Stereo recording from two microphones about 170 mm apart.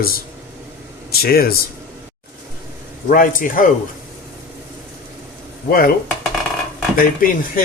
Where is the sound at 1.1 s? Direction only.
60° left (ahead or behind).